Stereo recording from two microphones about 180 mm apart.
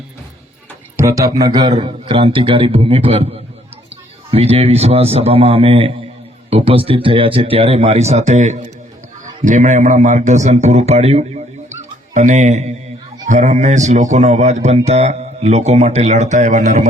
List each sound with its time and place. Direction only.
0.9 s a man's voice: 15° right (ahead or behind); by 16.9 s 40° right (ahead or behind)